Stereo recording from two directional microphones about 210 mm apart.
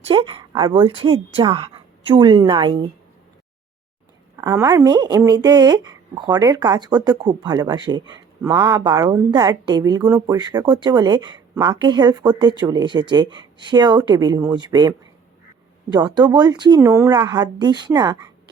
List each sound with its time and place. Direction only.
0.1 s a woman's voice: 25° right (ahead or behind)
4.4 s a woman's voice: 15° right (ahead or behind)